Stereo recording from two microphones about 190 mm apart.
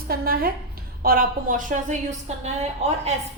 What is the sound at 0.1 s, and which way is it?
A woman's voice, 50° right (ahead or behind).